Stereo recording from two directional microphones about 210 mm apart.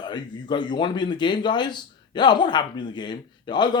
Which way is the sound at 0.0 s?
20° left (ahead or behind).